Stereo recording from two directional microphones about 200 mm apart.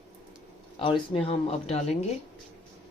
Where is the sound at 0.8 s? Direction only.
30° left (ahead or behind).